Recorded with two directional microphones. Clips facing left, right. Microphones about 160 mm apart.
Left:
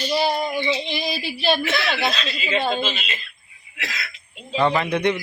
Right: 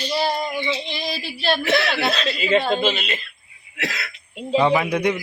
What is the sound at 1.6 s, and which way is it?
Speech, 55° right (ahead or behind).